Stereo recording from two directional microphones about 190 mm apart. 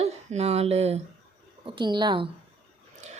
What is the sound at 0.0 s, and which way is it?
Speech, 35° right (ahead or behind).